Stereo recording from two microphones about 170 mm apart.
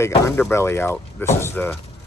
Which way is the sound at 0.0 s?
15° left (ahead or behind).